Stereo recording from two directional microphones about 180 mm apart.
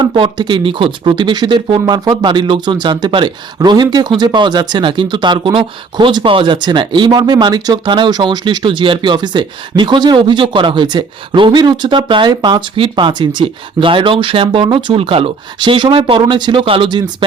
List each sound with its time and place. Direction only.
0.0 s speech: 25° right (ahead or behind)